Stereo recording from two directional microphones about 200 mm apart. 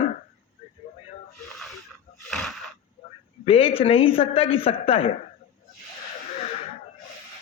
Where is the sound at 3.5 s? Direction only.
30° left (ahead or behind).